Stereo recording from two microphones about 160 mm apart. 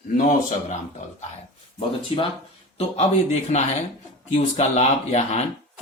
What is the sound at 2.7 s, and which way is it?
A man's voice, 40° left (ahead or behind).